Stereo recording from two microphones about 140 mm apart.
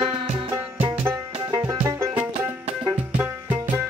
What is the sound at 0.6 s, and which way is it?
Music, 10° right (ahead or behind).